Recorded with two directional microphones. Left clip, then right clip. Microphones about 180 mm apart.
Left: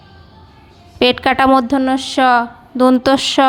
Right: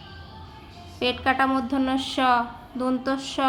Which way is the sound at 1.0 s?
55° left (ahead or behind).